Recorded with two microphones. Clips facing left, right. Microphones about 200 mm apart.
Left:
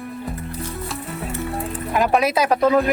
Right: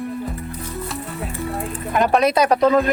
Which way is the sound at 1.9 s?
5° left (ahead or behind).